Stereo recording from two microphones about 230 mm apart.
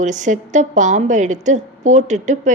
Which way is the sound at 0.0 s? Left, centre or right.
Right.